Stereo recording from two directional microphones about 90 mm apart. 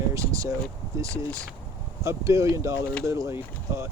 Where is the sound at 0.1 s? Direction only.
35° right (ahead or behind).